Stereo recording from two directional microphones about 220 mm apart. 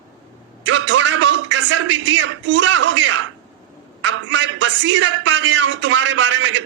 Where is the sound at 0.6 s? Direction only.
55° right (ahead or behind).